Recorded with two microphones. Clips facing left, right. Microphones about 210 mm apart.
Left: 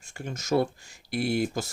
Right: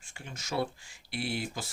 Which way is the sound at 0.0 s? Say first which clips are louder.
Left 9 dB; 45° left (ahead or behind).